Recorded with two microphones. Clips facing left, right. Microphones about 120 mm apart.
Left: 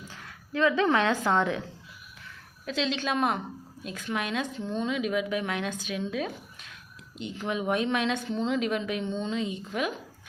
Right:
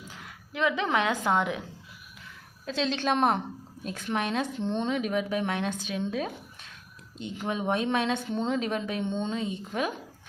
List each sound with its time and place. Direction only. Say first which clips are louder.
0.1 s a woman's voice: left 9 dB; 15° right (ahead or behind)
2.6 s a woman's voice: right 2 dB; 35° right (ahead or behind)